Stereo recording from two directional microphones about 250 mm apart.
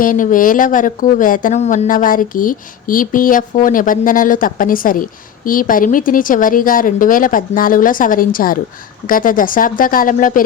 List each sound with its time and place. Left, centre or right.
0.0 s speech: left